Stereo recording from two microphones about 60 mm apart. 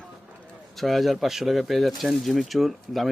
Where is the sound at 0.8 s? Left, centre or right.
Centre.